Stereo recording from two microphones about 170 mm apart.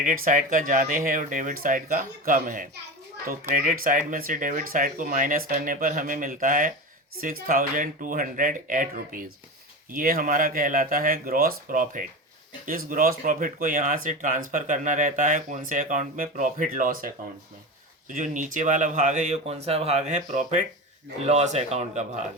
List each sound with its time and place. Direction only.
0.0 s speech: 50° right (ahead or behind)
18.1 s a man's voice: 50° right (ahead or behind)